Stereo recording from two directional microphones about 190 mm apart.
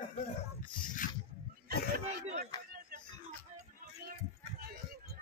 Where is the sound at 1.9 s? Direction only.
55° right (ahead or behind).